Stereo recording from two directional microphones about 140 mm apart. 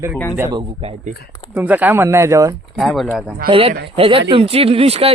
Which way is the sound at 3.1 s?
10° right (ahead or behind).